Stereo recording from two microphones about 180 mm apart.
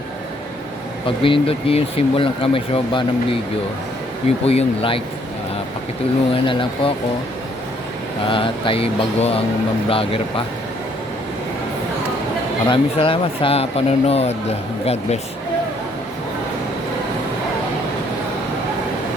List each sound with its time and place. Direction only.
1.0 s speech: 30° left (ahead or behind)
4.4 s speech: 30° left (ahead or behind)
6.3 s speech: 30° left (ahead or behind)
8.3 s speech: 30° left (ahead or behind)
12.6 s speech: 30° left (ahead or behind)